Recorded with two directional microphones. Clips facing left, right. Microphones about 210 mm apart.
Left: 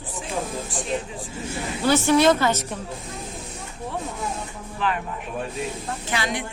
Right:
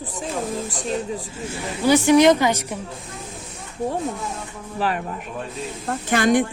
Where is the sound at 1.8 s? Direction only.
15° right (ahead or behind).